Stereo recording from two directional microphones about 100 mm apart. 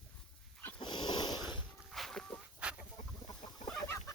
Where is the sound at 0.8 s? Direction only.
50° left (ahead or behind).